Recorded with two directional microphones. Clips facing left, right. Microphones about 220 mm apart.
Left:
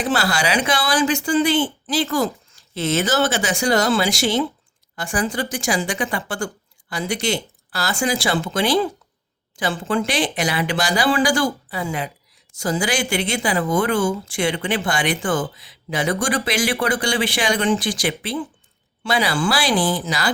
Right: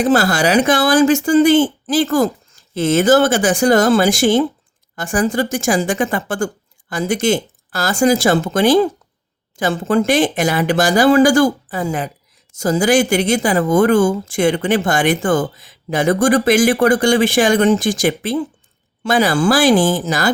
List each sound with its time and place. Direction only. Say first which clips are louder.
0.0 s speech: right 7 dB; 45° right (ahead or behind)